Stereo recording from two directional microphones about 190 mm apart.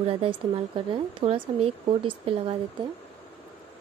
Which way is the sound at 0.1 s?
30° right (ahead or behind).